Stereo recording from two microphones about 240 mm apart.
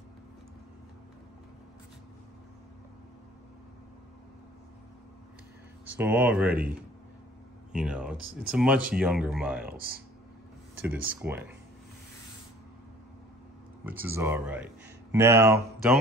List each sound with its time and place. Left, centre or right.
5.9 s speech: centre
7.7 s speech: centre
10.8 s speech: centre
13.8 s speech: centre